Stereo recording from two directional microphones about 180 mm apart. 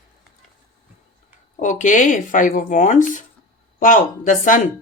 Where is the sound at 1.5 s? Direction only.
45° left (ahead or behind).